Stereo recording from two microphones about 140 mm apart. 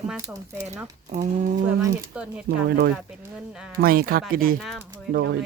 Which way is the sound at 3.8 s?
90° right.